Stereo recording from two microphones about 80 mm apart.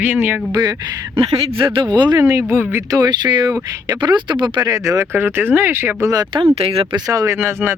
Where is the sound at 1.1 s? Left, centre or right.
Right.